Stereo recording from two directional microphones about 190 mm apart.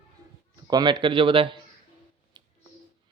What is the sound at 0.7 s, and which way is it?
Speech, 20° right (ahead or behind).